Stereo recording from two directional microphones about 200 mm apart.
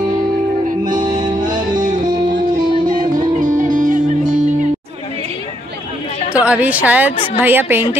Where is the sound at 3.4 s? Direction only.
40° right (ahead or behind).